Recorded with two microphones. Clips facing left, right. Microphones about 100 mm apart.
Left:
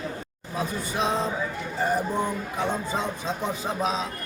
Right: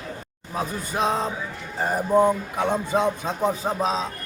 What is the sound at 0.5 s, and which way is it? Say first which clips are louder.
Speech: right 2 dB; 45° right (ahead or behind).